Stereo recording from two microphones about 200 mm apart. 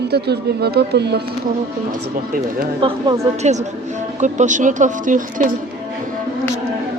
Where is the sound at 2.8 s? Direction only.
20° right (ahead or behind).